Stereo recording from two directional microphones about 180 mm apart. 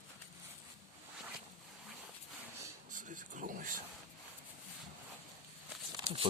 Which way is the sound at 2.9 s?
45° right (ahead or behind).